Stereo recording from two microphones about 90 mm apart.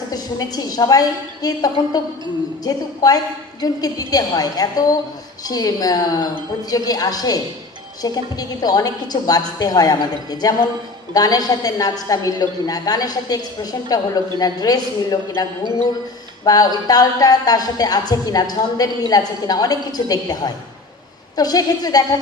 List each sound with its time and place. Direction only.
0.1 s speech: 45° left (ahead or behind)
16.4 s speech: 45° left (ahead or behind)